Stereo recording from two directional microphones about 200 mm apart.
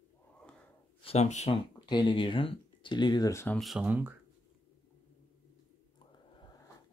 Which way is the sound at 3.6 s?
5° right (ahead or behind).